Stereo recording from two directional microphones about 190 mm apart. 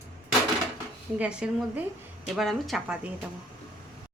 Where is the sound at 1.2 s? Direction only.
5° right (ahead or behind).